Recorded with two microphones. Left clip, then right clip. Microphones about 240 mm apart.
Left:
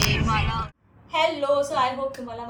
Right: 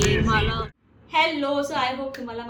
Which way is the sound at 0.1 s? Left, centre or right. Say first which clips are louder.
Right 2 dB; right.